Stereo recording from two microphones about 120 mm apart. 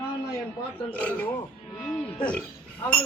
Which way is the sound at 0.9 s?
15° left (ahead or behind).